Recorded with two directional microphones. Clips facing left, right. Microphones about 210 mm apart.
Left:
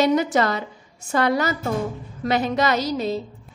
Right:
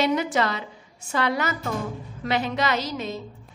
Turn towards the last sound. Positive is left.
turn(degrees=35)  # may be behind; listen again after turning